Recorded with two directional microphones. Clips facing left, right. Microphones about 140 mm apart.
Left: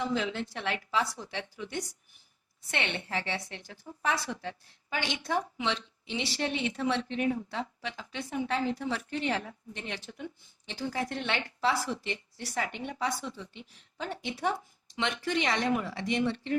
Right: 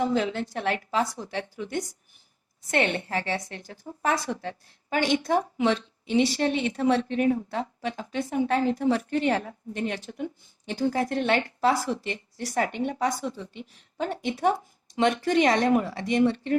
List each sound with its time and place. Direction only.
0.0 s a woman's voice: 45° right (ahead or behind)